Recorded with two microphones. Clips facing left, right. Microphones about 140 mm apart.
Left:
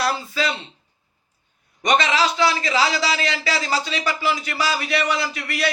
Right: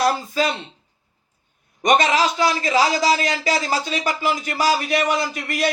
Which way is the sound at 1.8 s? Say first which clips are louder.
Right 2 dB; 45° right (ahead or behind).